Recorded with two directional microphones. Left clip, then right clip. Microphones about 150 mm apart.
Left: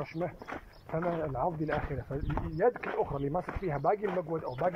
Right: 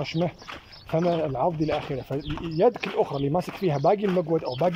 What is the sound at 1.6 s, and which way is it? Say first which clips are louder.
Speech: right 7 dB; 30° right (ahead or behind).